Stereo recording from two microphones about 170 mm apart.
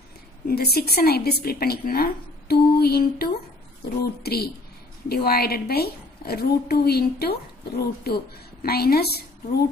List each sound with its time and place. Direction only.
0.5 s a woman's voice: 70° left (ahead or behind)